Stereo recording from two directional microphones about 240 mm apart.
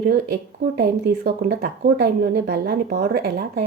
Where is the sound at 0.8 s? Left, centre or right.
Right.